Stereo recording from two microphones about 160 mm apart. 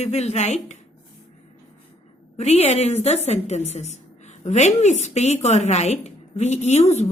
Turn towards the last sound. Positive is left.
turn(degrees=45)  # may be behind; listen again after turning